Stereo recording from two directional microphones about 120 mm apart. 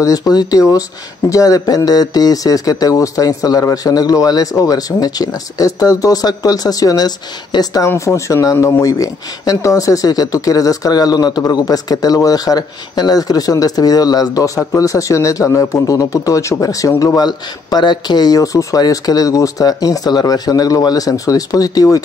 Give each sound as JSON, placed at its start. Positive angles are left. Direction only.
{"t": 0.0, "sound": "speech", "side_deg": 30}